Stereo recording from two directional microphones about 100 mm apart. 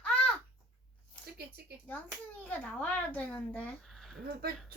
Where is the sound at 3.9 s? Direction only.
Centre (ahead or behind).